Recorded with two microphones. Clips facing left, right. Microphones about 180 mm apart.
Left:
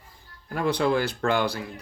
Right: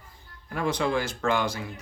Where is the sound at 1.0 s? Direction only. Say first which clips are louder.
Left 2 dB; 35° left (ahead or behind).